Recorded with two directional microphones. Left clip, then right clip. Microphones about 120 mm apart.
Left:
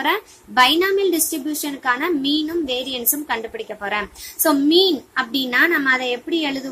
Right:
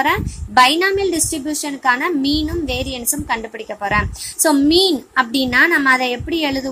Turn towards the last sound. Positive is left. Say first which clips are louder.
# right 3 dB
turn(degrees=-25)  # may be behind; listen again after turning